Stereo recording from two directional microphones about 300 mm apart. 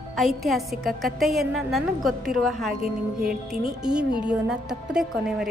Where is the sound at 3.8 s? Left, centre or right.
Centre.